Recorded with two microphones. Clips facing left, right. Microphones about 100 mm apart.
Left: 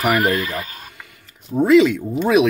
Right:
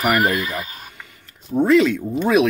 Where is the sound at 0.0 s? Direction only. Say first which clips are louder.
Left 1 dB; centre (ahead or behind).